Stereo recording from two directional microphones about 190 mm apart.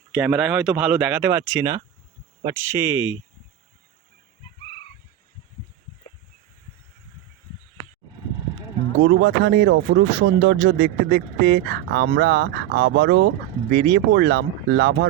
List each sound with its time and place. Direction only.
0.1 s speech: 5° right (ahead or behind)
9.0 s speech: 60° right (ahead or behind)
10.1 s speech: 50° right (ahead or behind)
10.5 s speech: 90° right
10.8 s speech: 55° right (ahead or behind)